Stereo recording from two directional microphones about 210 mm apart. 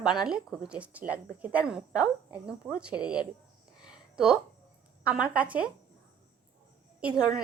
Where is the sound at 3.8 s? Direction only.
5° right (ahead or behind).